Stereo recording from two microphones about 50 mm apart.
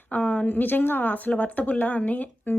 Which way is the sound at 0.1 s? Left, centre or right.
Left.